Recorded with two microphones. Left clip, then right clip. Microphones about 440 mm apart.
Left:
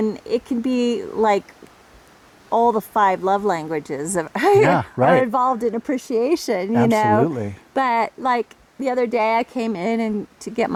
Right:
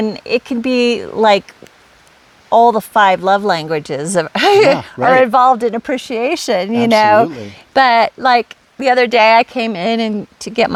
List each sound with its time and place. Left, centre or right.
0.0 s speech: right
2.5 s speech: right
4.8 s speech: centre
5.2 s speech: right